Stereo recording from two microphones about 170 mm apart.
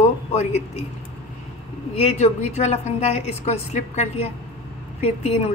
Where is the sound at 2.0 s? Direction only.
40° left (ahead or behind).